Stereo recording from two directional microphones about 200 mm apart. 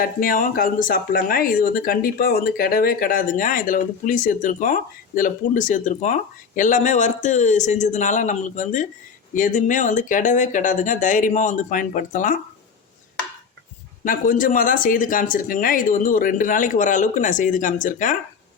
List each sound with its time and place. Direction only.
0.0 s speech: 45° left (ahead or behind)
14.0 s speech: 40° left (ahead or behind)